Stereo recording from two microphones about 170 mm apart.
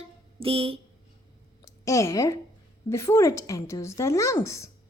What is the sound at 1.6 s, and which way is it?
A woman's voice, 20° left (ahead or behind).